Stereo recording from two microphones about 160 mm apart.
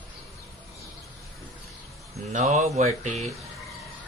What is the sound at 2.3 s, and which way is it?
Speech, 45° right (ahead or behind).